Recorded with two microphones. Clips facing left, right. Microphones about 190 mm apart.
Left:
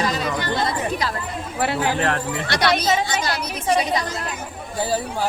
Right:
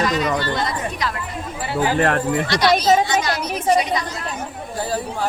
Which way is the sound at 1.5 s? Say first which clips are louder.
Left 3 dB; 70° left (ahead or behind).